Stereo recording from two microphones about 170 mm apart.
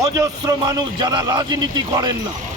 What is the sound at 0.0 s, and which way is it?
A man's voice, 20° right (ahead or behind).